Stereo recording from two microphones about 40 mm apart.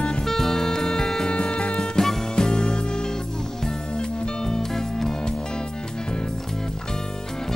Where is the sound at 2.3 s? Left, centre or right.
Left.